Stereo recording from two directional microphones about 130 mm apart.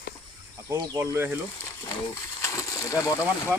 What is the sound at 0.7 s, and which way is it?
Speech, 20° right (ahead or behind).